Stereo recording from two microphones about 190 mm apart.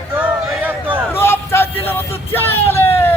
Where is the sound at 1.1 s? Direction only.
10° left (ahead or behind).